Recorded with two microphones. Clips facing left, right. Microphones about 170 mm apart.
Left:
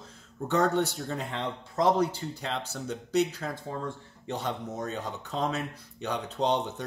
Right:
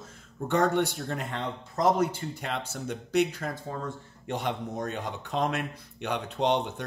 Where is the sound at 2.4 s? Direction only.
10° right (ahead or behind).